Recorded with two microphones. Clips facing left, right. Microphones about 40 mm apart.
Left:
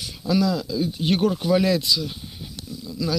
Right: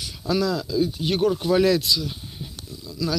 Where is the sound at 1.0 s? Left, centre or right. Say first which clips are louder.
Left 1 dB; left.